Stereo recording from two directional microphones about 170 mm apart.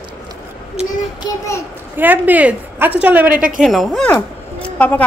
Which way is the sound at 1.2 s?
25° left (ahead or behind).